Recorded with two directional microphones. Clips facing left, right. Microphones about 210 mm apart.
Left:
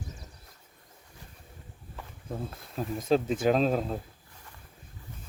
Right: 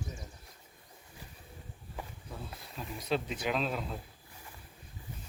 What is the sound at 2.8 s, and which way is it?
Speech, 45° left (ahead or behind).